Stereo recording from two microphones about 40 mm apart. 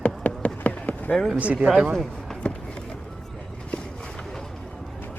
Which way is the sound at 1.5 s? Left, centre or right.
Right.